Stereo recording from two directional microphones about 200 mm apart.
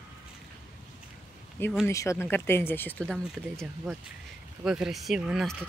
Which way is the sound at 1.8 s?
15° left (ahead or behind).